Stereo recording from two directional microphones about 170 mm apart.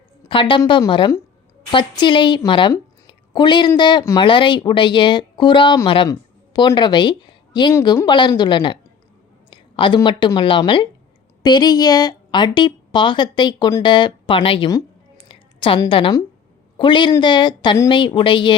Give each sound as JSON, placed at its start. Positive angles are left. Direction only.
{"t": 0.3, "sound": "a woman's voice", "side_deg": 30}
{"t": 14.7, "sound": "a sound", "side_deg": 25}
{"t": 16.7, "sound": "a woman's voice", "side_deg": 30}